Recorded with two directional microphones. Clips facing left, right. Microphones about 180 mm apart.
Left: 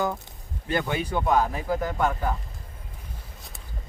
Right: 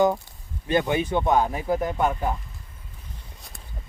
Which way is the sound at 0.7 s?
20° right (ahead or behind).